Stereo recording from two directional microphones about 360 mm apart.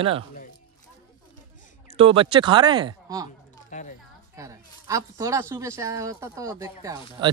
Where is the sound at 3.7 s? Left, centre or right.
Centre.